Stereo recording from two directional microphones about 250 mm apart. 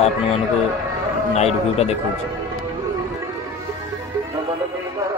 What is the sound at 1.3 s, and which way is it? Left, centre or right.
Speech, left.